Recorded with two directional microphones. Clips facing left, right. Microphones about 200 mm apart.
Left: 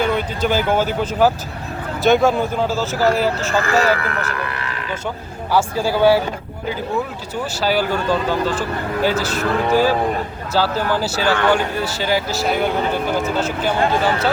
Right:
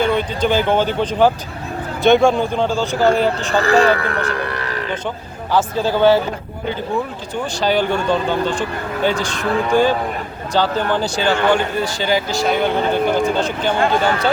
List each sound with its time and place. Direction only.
0.0 s speech: 5° left (ahead or behind)
3.5 s speech: 35° right (ahead or behind)
5.5 s speech: 10° left (ahead or behind)
7.5 s speech: 5° left (ahead or behind)